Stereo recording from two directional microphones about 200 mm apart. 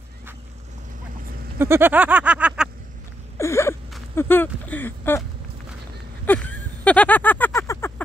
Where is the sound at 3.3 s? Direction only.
15° left (ahead or behind).